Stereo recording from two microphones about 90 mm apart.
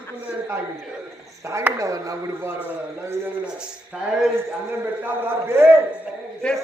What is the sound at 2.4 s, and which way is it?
Speech, 25° right (ahead or behind).